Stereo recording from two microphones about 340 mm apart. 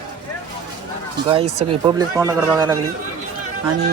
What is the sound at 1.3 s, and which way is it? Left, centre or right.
Speech, centre.